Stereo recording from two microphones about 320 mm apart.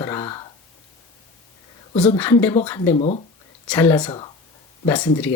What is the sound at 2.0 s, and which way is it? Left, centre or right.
A woman's voice, centre.